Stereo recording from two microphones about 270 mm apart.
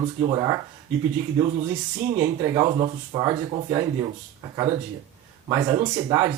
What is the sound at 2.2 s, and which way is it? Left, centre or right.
Speech, centre.